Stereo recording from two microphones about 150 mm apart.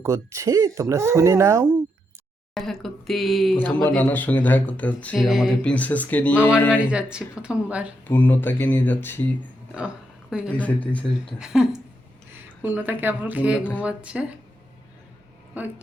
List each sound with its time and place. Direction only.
0.0 s speech: 20° right (ahead or behind)
2.6 s speech: centre (ahead or behind)
3.6 s speech: 10° left (ahead or behind)
6.8 s speech: 5° right (ahead or behind)
8.0 s speech: 10° left (ahead or behind)
9.7 s a sound: 5° right (ahead or behind)
10.5 s speech: 10° left (ahead or behind)
11.3 s speech: 5° right (ahead or behind)